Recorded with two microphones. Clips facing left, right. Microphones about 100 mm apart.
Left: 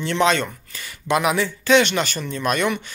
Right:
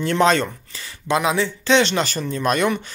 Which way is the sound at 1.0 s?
20° right (ahead or behind).